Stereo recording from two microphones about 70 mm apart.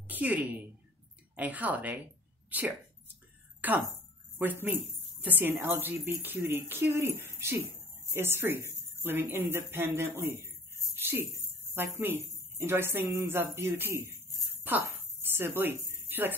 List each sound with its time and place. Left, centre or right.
0.0 s a woman's voice: right
3.6 s a woman's voice: right
11.0 s jingle bell: right
11.7 s a woman's voice: right